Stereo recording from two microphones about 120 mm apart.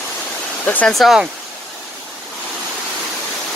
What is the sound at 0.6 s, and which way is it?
Speech, 10° left (ahead or behind).